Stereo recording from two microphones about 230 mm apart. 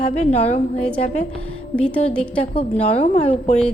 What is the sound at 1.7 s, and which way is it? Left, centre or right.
Speech, centre.